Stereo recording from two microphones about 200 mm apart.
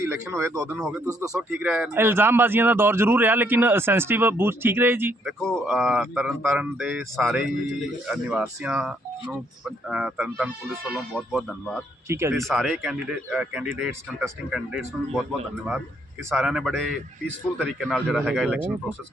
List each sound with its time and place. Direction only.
0.0 s speech: 15° right (ahead or behind)
0.8 s speech: 5° right (ahead or behind)
5.4 s speech: centre (ahead or behind)
12.0 s speech: 15° right (ahead or behind)
12.5 s speech: centre (ahead or behind)